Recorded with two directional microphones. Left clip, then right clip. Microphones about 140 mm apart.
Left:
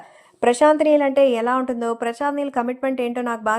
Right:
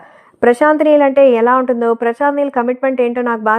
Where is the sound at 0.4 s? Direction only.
45° right (ahead or behind).